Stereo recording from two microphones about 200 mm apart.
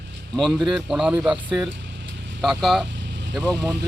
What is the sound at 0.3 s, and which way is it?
A man's voice, centre (ahead or behind).